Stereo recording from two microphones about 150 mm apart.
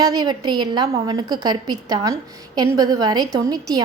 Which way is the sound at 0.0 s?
25° right (ahead or behind).